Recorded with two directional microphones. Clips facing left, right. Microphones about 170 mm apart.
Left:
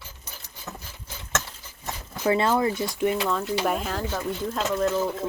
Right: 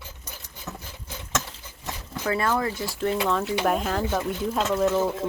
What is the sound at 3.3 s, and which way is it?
Speech, centre (ahead or behind).